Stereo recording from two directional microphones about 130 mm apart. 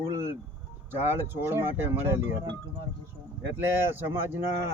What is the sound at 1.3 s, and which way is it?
Speech, 20° right (ahead or behind).